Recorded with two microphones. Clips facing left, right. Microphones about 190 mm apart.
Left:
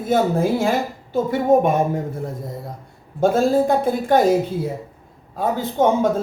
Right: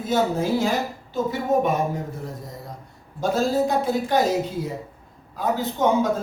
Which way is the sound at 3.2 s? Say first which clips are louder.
Left 5 dB; 55° left (ahead or behind).